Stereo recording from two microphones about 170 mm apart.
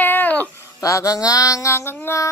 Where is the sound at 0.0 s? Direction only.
10° left (ahead or behind).